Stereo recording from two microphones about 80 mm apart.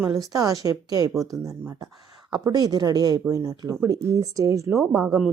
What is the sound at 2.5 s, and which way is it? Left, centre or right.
Speech, right.